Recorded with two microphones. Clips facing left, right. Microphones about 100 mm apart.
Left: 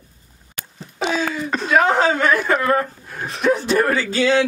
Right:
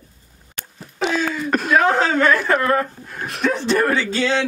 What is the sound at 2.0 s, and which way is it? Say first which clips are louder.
A woman's voice: even; 15° left (ahead or behind).